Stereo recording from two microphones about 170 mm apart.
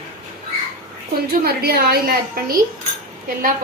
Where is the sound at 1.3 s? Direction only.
65° right (ahead or behind).